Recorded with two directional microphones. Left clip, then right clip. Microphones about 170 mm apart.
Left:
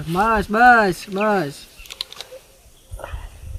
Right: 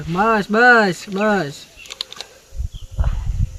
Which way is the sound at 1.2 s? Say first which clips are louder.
Right 1 dB; 10° left (ahead or behind).